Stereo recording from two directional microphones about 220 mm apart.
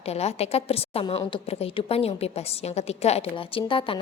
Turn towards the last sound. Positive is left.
turn(degrees=25)  # may be behind; listen again after turning